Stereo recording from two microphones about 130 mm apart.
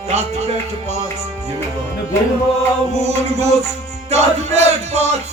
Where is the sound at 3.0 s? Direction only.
55° right (ahead or behind).